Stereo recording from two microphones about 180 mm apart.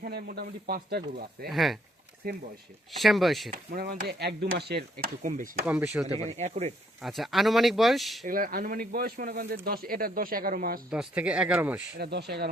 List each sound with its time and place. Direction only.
0.0 s speech: 60° right (ahead or behind)
1.5 s speech: centre (ahead or behind)
2.2 s speech: 55° right (ahead or behind)
3.0 s speech: centre (ahead or behind)
3.5 s speech: 55° right (ahead or behind)
5.6 s speech: 10° right (ahead or behind)
6.1 s speech: 40° right (ahead or behind)
7.0 s speech: centre (ahead or behind)
8.3 s speech: 50° right (ahead or behind)
10.9 s speech: 5° right (ahead or behind)
11.9 s speech: 65° right (ahead or behind)